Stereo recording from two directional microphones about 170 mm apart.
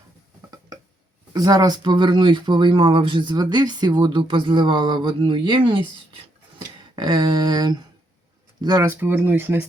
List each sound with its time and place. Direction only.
1.3 s speech: 20° right (ahead or behind)
6.9 s speech: 25° right (ahead or behind)
9.0 s speech: 10° right (ahead or behind)